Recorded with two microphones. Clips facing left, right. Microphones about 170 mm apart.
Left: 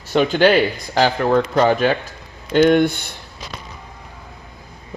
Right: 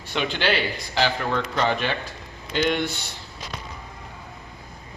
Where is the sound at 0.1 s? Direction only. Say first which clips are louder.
Left 10 dB; 45° left (ahead or behind).